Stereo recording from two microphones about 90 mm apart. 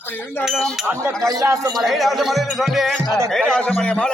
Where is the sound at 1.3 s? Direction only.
35° right (ahead or behind).